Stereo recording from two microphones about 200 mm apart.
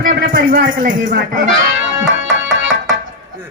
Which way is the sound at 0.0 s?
45° right (ahead or behind).